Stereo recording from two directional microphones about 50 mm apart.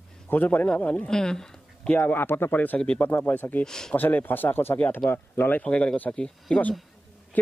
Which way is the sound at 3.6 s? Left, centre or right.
Centre.